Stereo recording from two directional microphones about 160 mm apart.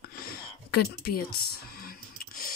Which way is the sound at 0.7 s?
75° left (ahead or behind).